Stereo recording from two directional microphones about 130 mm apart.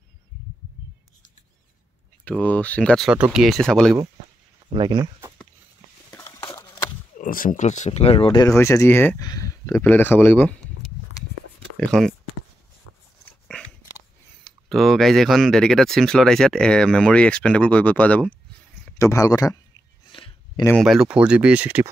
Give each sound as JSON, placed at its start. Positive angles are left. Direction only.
{"t": 2.2, "sound": "speech", "side_deg": 10}
{"t": 3.1, "sound": "speech", "side_deg": -5}
{"t": 4.7, "sound": "speech", "side_deg": -35}
{"t": 6.1, "sound": "a sound", "side_deg": 20}
{"t": 7.2, "sound": "speech", "side_deg": 90}
{"t": 8.4, "sound": "speech", "side_deg": 25}
{"t": 9.2, "sound": "speech", "side_deg": 25}
{"t": 9.8, "sound": "speech", "side_deg": 15}
{"t": 11.7, "sound": "speech", "side_deg": 5}
{"t": 13.5, "sound": "biting", "side_deg": 5}
{"t": 14.4, "sound": "speech", "side_deg": 0}
{"t": 18.9, "sound": "speech", "side_deg": 25}
{"t": 20.1, "sound": "a sound", "side_deg": 40}
{"t": 20.7, "sound": "speech", "side_deg": 0}